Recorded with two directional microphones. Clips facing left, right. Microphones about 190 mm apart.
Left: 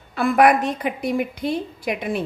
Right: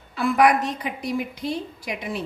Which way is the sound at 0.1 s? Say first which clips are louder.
Left 3 dB; 55° left (ahead or behind).